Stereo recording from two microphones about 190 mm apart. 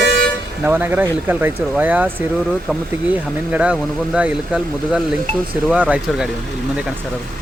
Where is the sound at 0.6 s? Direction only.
10° right (ahead or behind).